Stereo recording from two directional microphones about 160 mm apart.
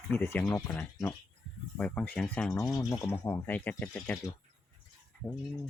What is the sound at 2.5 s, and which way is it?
Speech, 20° left (ahead or behind).